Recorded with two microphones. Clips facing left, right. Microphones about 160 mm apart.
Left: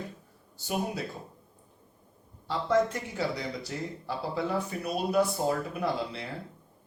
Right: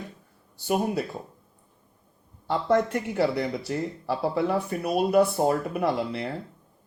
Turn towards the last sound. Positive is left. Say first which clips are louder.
# right 5 dB
turn(degrees=-60)  # may be behind; listen again after turning